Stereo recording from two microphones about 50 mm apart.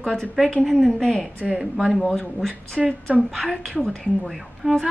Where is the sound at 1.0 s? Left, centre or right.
Centre.